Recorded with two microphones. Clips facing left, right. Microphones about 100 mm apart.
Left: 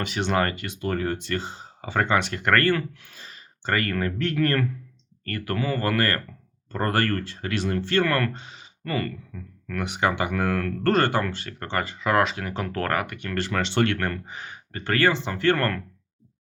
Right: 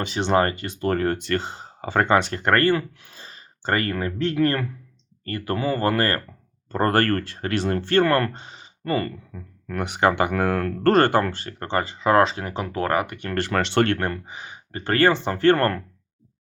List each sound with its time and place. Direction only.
0.0 s speech: 30° right (ahead or behind); by 1.6 s 60° right (ahead or behind)
1.8 s speech: 45° right (ahead or behind); by 6.2 s 30° right (ahead or behind)
6.7 s speech: 40° right (ahead or behind)
9.8 s speech: 50° right (ahead or behind); by 13.1 s 20° right (ahead or behind)
13.3 s speech: 55° right (ahead or behind)
14.0 s speech: 20° right (ahead or behind)
14.7 s speech: 30° right (ahead or behind)